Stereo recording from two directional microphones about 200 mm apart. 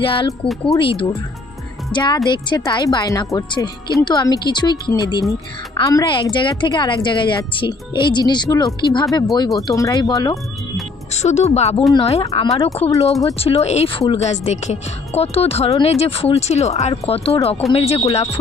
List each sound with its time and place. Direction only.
0.0 s a woman's voice: 25° left (ahead or behind)
11.2 s a woman's voice: 35° left (ahead or behind)